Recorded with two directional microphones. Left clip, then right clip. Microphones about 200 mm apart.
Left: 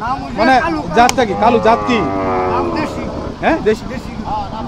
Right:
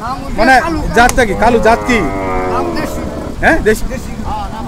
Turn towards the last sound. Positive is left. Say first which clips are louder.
# right 4 dB
turn(degrees=-20)  # may be behind; listen again after turning